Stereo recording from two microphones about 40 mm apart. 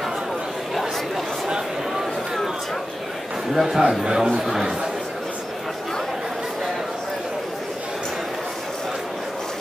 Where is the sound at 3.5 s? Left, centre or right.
Centre.